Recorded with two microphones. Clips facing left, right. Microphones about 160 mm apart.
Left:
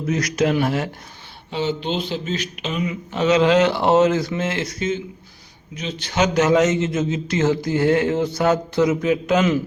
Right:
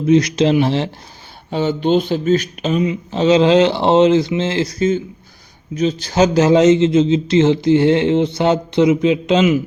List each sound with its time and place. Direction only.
0.0 s a man's voice: 25° right (ahead or behind)
1.5 s speech: 50° right (ahead or behind)
2.8 s a man's voice: 25° right (ahead or behind)